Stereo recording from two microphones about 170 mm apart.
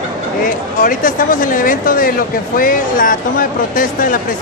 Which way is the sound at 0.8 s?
50° left (ahead or behind).